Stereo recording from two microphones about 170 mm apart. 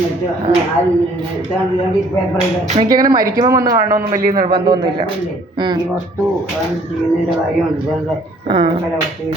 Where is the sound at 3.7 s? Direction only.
55° right (ahead or behind).